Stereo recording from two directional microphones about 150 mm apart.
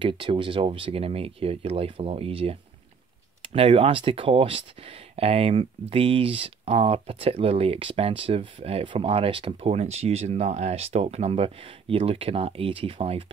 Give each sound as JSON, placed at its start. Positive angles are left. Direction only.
{"t": 0.0, "sound": "speech", "side_deg": -35}